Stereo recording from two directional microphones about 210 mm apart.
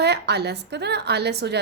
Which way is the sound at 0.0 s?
50° right (ahead or behind).